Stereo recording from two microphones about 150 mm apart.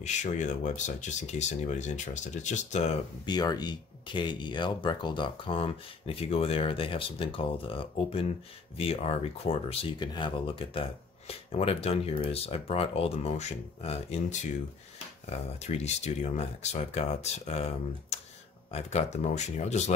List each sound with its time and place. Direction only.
0.0 s speech: 50° left (ahead or behind)
3.3 s speech: 25° left (ahead or behind); by 19.8 s 50° left (ahead or behind)